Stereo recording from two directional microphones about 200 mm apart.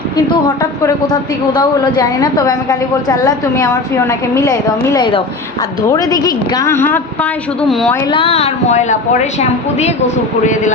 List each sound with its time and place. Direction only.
0.6 s a woman's voice: 15° left (ahead or behind)
5.8 s a woman's voice: 15° left (ahead or behind)
8.0 s speech: 25° left (ahead or behind)